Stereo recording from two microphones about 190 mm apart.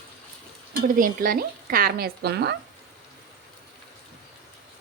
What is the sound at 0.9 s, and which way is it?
Speech, 45° right (ahead or behind).